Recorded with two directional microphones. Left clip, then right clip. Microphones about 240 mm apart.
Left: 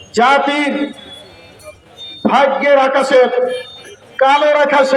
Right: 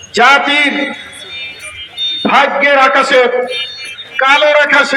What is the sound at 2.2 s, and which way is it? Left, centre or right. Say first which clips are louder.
A man's voice: right 2 dB; left.